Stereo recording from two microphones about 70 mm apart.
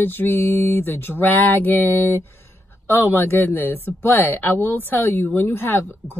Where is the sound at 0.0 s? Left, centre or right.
Left.